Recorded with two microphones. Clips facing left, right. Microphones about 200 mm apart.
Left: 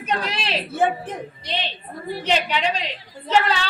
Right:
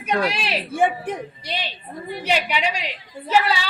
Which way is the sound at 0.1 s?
10° right (ahead or behind).